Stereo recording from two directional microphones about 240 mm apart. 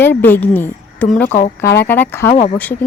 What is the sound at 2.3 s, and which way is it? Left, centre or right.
Speech, left.